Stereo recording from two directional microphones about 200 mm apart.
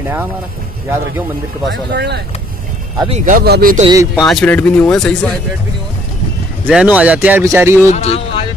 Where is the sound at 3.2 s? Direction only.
45° right (ahead or behind).